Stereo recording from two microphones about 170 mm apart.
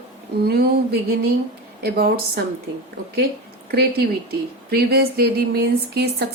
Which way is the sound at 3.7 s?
65° right (ahead or behind).